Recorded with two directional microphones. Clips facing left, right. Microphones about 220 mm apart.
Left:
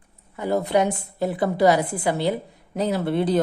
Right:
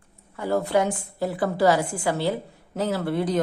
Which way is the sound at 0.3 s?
20° left (ahead or behind).